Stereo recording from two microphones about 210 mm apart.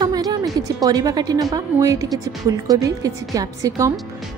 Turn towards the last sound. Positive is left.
turn(degrees=-15)  # may be behind; listen again after turning